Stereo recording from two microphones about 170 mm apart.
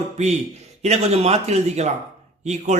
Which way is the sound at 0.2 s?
40° right (ahead or behind).